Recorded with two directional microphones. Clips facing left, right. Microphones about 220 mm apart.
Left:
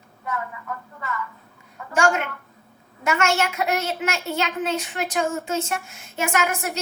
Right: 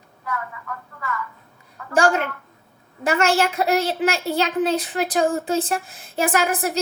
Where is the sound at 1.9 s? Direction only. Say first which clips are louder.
Right 2 dB; 35° right (ahead or behind).